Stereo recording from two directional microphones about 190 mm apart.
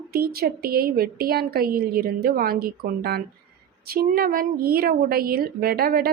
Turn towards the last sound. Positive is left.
turn(degrees=-50)  # may be behind; listen again after turning